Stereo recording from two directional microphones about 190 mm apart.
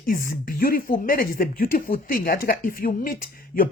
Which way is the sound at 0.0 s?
45° left (ahead or behind).